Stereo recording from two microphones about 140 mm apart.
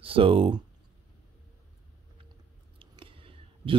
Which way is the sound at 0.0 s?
40° right (ahead or behind).